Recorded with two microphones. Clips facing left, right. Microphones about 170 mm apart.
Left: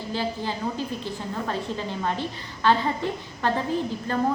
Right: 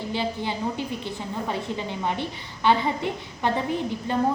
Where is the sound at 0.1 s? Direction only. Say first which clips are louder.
Left 1 dB; 20° right (ahead or behind).